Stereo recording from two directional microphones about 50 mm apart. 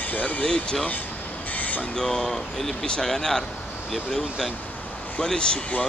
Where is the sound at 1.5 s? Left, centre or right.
Left.